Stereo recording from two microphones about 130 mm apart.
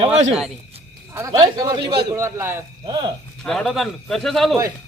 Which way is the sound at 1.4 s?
30° right (ahead or behind).